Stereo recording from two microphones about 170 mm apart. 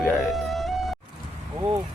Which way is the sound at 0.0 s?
Centre (ahead or behind).